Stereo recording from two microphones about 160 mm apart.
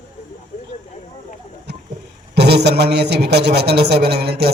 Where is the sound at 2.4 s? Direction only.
90° right.